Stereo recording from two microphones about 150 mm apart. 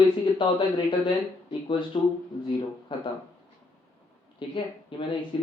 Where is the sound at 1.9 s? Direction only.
40° left (ahead or behind).